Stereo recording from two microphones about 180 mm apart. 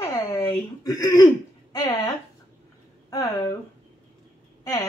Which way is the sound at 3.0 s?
20° left (ahead or behind).